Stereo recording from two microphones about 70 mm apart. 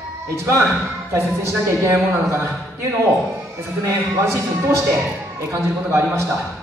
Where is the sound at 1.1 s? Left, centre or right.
Right.